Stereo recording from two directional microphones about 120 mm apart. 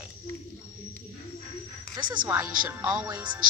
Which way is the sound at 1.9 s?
40° right (ahead or behind).